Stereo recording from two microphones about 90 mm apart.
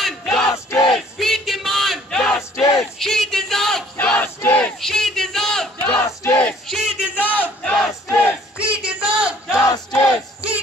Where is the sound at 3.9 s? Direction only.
20° left (ahead or behind).